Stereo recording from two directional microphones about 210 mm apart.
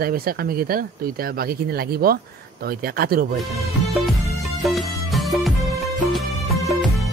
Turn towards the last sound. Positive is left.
turn(degrees=0)  # may be behind; listen again after turning